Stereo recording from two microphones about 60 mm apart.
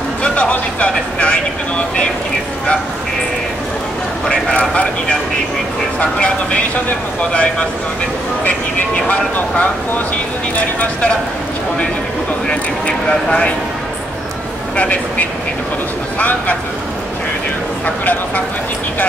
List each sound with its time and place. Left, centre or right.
0.2 s speech: left
4.3 s speech: left
5.9 s speech: left
9.0 s speech: left
12.4 s speech: centre
14.8 s speech: left
17.8 s speech: left